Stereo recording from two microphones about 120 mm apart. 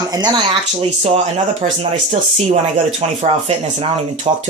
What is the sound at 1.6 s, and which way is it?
Speech, 90° right.